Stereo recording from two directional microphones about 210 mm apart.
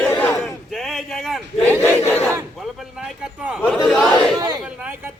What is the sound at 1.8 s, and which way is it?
Crowd, 10° left (ahead or behind).